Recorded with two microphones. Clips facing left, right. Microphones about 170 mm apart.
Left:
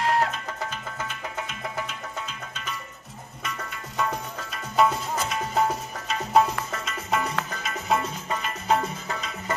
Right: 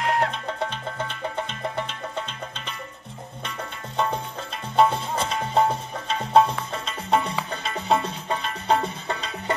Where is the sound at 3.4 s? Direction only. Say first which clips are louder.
Even; 30° right (ahead or behind).